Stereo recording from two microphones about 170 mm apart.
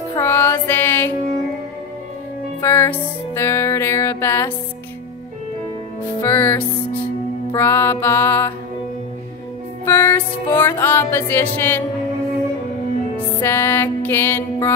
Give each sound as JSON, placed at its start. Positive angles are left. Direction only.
{"t": 0.2, "sound": "music", "side_deg": 15}
{"t": 2.6, "sound": "music", "side_deg": 15}
{"t": 6.2, "sound": "music", "side_deg": 10}
{"t": 9.8, "sound": "music", "side_deg": 15}
{"t": 13.4, "sound": "music", "side_deg": 15}